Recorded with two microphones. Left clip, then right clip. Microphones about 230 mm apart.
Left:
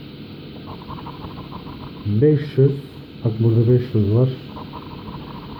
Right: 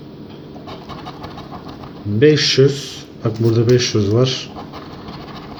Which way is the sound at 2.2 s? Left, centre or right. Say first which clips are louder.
Right 6 dB; centre.